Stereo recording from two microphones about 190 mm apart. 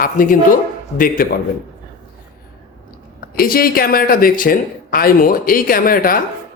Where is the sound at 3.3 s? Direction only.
50° left (ahead or behind).